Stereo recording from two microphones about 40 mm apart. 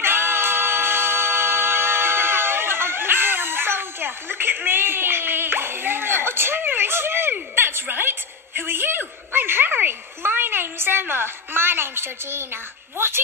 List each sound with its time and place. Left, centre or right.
0.0 s music: right
4.4 s a sound: right
12.9 s speech: right